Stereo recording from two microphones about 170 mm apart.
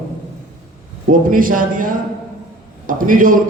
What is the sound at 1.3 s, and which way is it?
A man's voice, 55° right (ahead or behind).